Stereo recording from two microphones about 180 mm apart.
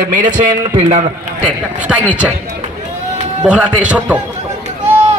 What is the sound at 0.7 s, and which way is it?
Speech, 40° right (ahead or behind).